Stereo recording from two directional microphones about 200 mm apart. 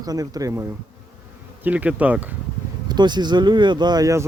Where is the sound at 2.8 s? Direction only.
20° right (ahead or behind).